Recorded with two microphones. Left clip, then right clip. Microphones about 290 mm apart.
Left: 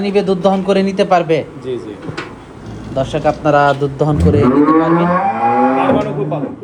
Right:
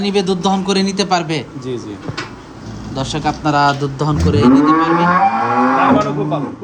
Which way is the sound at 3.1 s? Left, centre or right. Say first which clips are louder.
Left 3 dB; centre.